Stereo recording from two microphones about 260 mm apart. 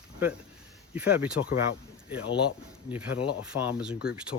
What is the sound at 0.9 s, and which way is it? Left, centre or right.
Speech, centre.